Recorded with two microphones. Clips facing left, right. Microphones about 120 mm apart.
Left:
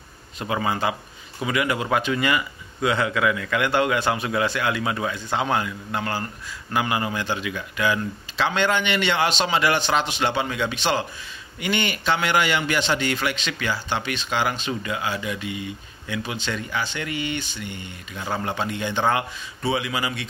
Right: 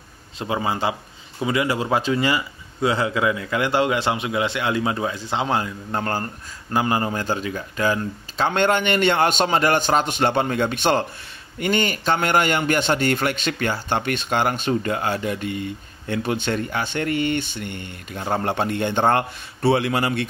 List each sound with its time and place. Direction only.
0.4 s a man's voice: 25° right (ahead or behind); by 11.1 s 50° right (ahead or behind)
11.6 s a man's voice: 40° right (ahead or behind)